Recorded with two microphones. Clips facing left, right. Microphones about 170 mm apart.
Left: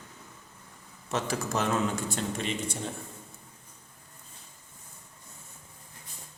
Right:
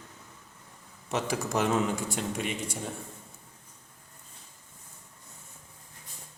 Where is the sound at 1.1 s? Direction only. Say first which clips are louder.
Right 1 dB; 15° right (ahead or behind).